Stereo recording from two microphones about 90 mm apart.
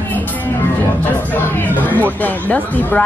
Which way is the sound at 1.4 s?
20° left (ahead or behind).